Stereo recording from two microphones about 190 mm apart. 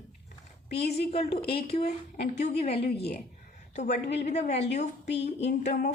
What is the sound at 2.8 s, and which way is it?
Speech, 55° left (ahead or behind).